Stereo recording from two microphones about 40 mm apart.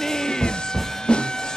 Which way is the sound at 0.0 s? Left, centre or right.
Centre.